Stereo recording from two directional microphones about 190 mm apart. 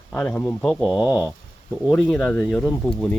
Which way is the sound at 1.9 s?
5° left (ahead or behind).